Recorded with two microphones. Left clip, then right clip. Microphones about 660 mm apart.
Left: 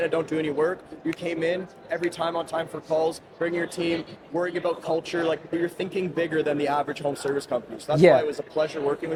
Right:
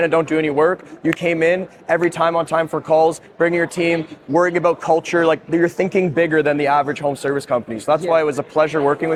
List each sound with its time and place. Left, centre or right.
0.0 s speech: right